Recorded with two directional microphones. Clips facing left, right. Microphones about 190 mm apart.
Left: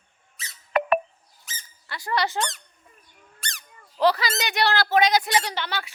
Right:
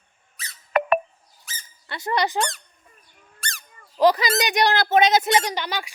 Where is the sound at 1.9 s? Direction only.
20° right (ahead or behind).